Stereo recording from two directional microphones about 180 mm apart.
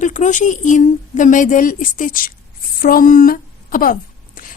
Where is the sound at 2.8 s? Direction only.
50° left (ahead or behind).